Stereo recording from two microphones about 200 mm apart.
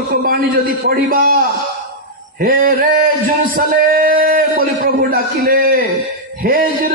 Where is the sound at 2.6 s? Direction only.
45° right (ahead or behind).